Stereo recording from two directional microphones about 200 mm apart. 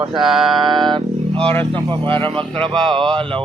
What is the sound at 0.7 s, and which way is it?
Speech, 20° right (ahead or behind).